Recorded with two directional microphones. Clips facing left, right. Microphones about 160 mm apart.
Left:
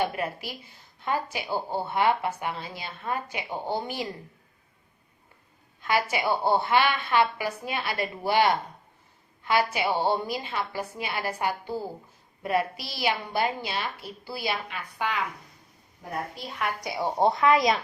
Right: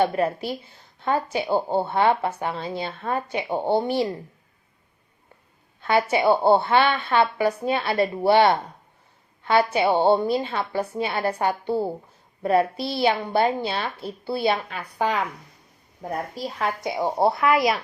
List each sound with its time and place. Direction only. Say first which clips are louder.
0.0 s a woman's voice: right 7 dB; 30° right (ahead or behind)
1.5 s speech: right 8 dB; 55° right (ahead or behind)
1.9 s a woman's voice: right 1 dB; 30° right (ahead or behind)
3.5 s speech: right 8 dB; 60° right (ahead or behind)
3.8 s a woman's voice: right 9 dB; 30° right (ahead or behind)
5.8 s a woman's voice: right 6 dB; 30° right (ahead or behind)
16.8 s a woman's voice: right 5 dB; 20° right (ahead or behind)
17.5 s speech: right 1 dB; 5° right (ahead or behind)